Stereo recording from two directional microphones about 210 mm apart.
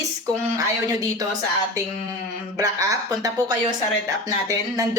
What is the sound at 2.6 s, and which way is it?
Speech, 15° right (ahead or behind).